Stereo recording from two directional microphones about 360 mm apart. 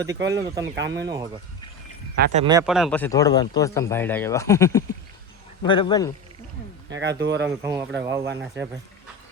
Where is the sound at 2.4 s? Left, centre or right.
Centre.